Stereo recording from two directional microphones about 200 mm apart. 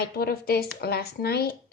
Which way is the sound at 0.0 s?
50° left (ahead or behind).